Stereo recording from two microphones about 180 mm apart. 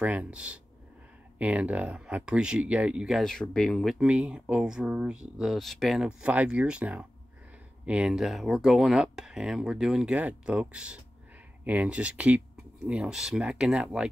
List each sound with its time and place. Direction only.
0.0 s speech: 10° right (ahead or behind)